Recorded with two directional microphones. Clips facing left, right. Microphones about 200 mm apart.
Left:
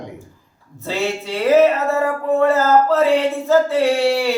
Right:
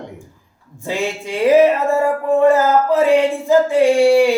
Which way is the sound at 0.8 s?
15° right (ahead or behind).